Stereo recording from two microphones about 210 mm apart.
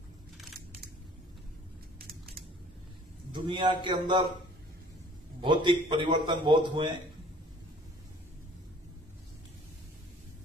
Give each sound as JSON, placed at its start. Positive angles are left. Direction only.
{"t": 3.3, "sound": "a man's voice", "side_deg": -25}
{"t": 5.4, "sound": "a man's voice", "side_deg": -25}